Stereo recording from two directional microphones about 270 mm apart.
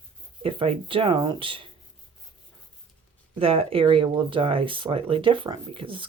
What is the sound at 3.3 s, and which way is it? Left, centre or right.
Speech, right.